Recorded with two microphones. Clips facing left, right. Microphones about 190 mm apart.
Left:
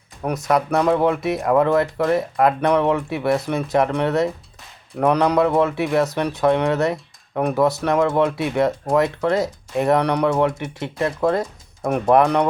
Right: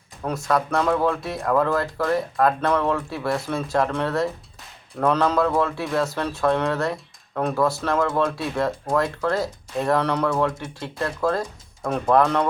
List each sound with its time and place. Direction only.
0.2 s speech: 20° left (ahead or behind)